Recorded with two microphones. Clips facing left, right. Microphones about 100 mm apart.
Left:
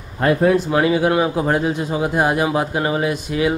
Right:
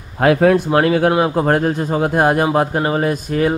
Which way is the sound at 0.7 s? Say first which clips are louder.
Right 2 dB; 50° right (ahead or behind).